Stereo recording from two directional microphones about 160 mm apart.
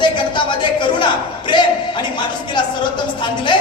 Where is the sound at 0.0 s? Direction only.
30° left (ahead or behind).